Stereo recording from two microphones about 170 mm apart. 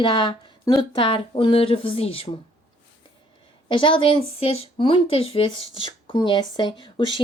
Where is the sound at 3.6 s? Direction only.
30° left (ahead or behind).